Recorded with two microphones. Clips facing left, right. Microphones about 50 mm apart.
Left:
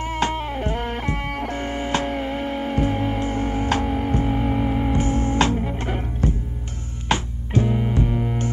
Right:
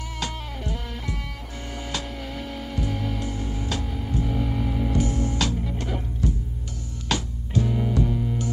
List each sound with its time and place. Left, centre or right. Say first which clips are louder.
0.0 s music: left 9 dB; left